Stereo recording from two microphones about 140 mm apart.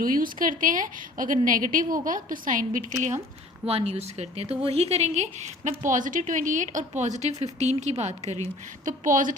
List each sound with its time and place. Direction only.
0.0 s a woman's voice: 85° right; by 3.2 s 65° right (ahead or behind)
3.7 s a woman's voice: 45° right (ahead or behind)
8.8 s a woman's voice: 70° right (ahead or behind)